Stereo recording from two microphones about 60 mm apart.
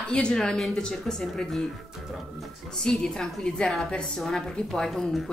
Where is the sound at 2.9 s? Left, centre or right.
Centre.